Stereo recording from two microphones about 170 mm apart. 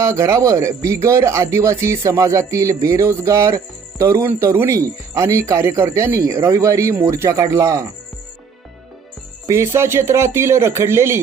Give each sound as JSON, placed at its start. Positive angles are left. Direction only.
{"t": 0.0, "sound": "speech", "side_deg": -15}
{"t": 9.5, "sound": "speech", "side_deg": -15}